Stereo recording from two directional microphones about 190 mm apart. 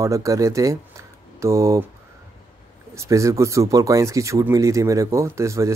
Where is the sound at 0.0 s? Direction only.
15° right (ahead or behind).